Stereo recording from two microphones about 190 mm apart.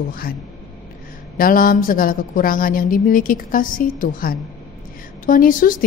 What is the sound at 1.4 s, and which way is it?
A woman's voice, 45° left (ahead or behind).